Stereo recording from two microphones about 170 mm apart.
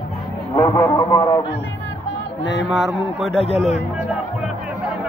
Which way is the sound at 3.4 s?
35° left (ahead or behind).